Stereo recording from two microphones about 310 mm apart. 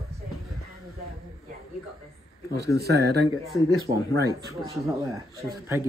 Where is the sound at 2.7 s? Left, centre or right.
Right.